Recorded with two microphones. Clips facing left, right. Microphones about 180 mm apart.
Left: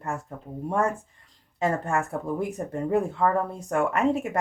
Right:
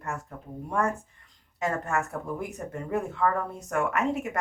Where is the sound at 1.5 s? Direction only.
30° left (ahead or behind).